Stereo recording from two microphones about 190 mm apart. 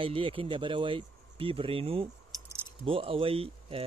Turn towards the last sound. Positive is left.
turn(degrees=-30)  # may be behind; listen again after turning